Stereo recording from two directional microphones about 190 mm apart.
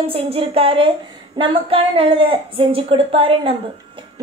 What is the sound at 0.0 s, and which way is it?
A woman's voice, 30° right (ahead or behind).